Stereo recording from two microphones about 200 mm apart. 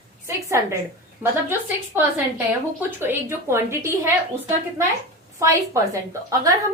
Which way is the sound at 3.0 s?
10° right (ahead or behind).